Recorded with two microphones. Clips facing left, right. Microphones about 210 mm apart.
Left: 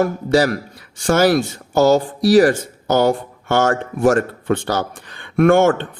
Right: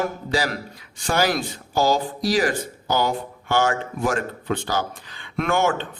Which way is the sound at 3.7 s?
50° left (ahead or behind).